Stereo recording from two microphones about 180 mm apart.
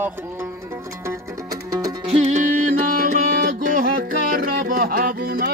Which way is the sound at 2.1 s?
40° right (ahead or behind).